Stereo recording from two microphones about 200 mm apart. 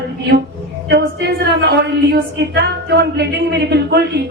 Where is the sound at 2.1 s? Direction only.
55° right (ahead or behind).